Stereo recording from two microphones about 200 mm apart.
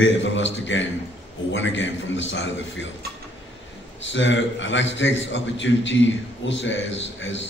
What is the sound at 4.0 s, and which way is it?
A man's voice, 65° left (ahead or behind).